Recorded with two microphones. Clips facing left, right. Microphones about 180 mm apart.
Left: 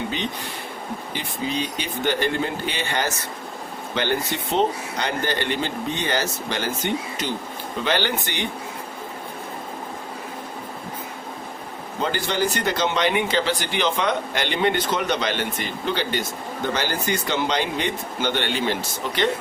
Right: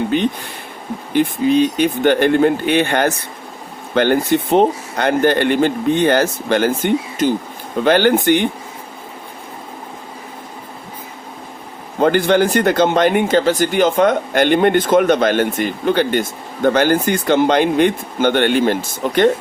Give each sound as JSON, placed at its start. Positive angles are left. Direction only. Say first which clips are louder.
{"t": 0.1, "sound": "speech", "louder": "right 10 dB", "side_deg": -55}
{"t": 11.9, "sound": "speech", "louder": "right 11 dB", "side_deg": -55}